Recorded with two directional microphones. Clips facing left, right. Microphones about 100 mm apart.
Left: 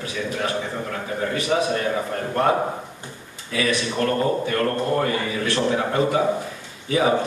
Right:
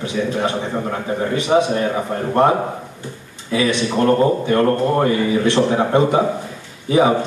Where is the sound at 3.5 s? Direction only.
25° right (ahead or behind).